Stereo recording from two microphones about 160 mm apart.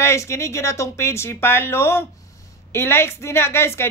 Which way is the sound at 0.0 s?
15° left (ahead or behind).